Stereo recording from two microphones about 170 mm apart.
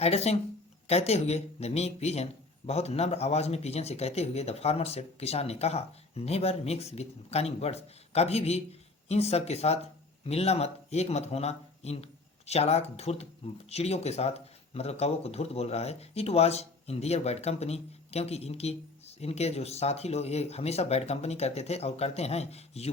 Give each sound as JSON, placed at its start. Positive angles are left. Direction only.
{"t": 0.0, "sound": "speech", "side_deg": 35}